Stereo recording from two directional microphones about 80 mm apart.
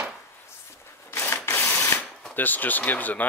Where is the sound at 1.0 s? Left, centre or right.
Left.